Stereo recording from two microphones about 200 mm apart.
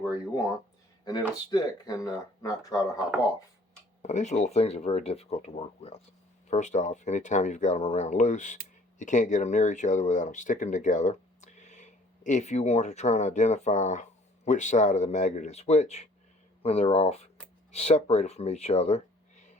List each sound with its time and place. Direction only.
1.0 s speech: 20° left (ahead or behind)
4.0 s speech: 35° left (ahead or behind)